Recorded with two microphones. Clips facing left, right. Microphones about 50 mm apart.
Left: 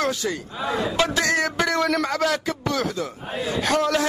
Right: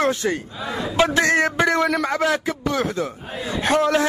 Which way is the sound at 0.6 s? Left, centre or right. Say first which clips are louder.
Left 2 dB; left.